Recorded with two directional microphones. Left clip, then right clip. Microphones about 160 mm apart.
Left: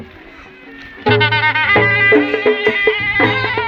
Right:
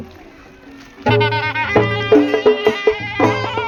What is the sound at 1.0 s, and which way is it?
Music, 90° right.